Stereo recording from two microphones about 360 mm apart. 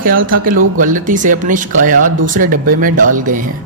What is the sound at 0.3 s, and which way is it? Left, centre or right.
Speech, right.